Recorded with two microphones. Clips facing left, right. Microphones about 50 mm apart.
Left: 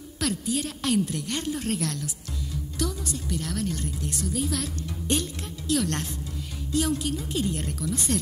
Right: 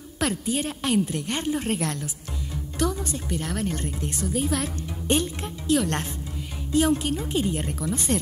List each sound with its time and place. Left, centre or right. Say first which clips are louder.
0.2 s a woman's voice: right 2 dB; right
7.4 s a woman's voice: right 2 dB; right